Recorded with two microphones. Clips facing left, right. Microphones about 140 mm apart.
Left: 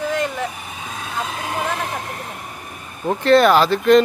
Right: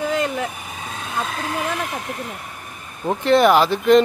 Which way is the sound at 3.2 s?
15° right (ahead or behind).